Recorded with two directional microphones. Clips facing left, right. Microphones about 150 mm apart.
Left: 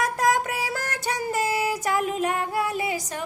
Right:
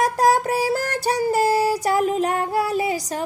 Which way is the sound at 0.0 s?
35° right (ahead or behind).